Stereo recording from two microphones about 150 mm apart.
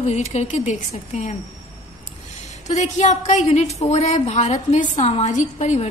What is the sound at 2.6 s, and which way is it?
A woman's voice, 50° left (ahead or behind).